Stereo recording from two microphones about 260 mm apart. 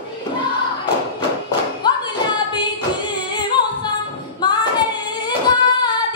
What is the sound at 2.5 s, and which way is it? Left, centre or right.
Music, centre.